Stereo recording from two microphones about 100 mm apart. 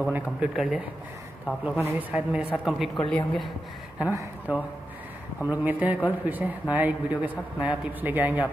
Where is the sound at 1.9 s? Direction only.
15° right (ahead or behind).